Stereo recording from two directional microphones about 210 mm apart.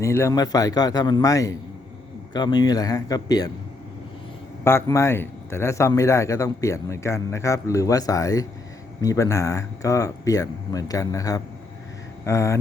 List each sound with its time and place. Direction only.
0.0 s a man's voice: 15° left (ahead or behind)
4.6 s a man's voice: 15° left (ahead or behind)